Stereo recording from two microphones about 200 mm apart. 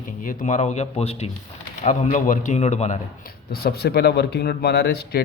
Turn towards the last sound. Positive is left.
turn(degrees=55)  # may be behind; listen again after turning